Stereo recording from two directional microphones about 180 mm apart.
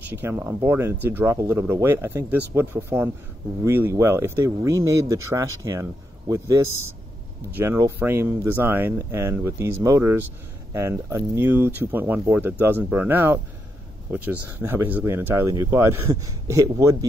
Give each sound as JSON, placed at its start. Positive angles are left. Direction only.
{"t": 0.1, "sound": "speech", "side_deg": -10}